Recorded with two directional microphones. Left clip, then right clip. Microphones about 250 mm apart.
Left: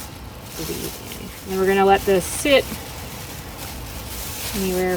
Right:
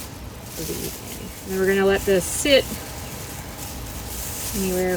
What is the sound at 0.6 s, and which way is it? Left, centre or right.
Speech, centre.